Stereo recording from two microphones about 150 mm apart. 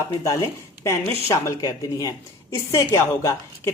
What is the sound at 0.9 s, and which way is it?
A woman's voice, 20° left (ahead or behind).